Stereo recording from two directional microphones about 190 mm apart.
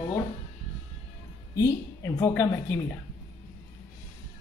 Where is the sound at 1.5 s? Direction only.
15° left (ahead or behind).